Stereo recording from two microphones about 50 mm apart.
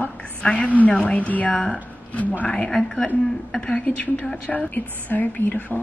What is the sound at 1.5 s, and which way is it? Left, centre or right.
A woman's voice, centre.